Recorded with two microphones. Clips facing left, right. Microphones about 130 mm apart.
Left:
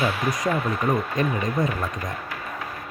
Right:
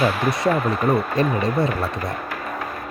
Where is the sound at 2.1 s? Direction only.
55° right (ahead or behind).